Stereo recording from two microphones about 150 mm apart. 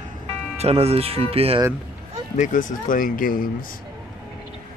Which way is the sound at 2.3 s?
60° left (ahead or behind).